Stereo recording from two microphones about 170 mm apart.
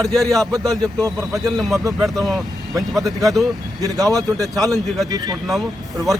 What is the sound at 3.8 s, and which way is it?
Speech, 20° right (ahead or behind).